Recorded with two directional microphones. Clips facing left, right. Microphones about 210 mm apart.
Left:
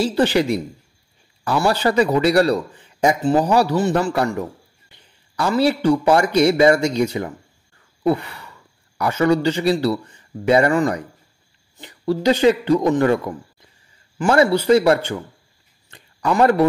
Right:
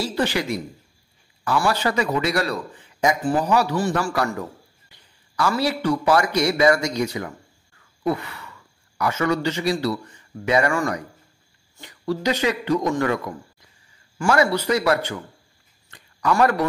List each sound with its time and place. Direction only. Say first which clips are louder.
0.0 s a man's voice: left 6 dB; 30° left (ahead or behind)
8.0 s sigh: left 5 dB; 30° left (ahead or behind)
8.9 s a man's voice: left 5 dB; 30° left (ahead or behind)
15.9 s a sound: left 1 dB; 30° left (ahead or behind)